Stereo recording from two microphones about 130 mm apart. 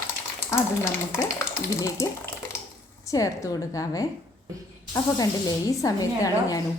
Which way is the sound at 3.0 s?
25° left (ahead or behind).